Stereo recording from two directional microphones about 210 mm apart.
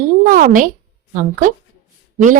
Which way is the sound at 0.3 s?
40° right (ahead or behind).